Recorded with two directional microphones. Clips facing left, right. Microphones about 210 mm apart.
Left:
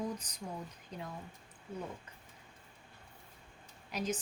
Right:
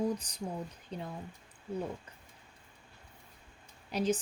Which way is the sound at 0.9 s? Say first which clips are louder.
Right 4 dB; 30° right (ahead or behind).